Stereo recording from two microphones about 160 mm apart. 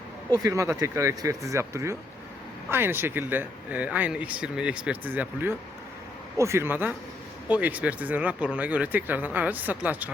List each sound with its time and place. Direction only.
0.3 s speech: 20° right (ahead or behind)